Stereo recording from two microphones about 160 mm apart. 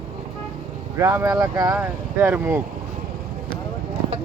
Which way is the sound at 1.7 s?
10° right (ahead or behind).